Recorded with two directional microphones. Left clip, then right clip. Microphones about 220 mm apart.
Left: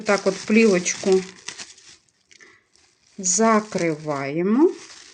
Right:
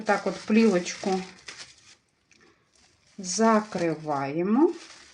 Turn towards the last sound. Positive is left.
turn(degrees=30)  # may be behind; listen again after turning